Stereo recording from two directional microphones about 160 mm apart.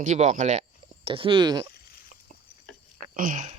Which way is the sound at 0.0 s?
50° right (ahead or behind).